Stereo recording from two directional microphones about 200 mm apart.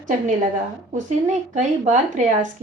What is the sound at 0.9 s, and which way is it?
Speech, 35° right (ahead or behind).